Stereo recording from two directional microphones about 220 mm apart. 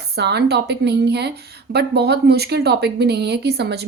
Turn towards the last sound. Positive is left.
turn(degrees=-50)  # may be behind; listen again after turning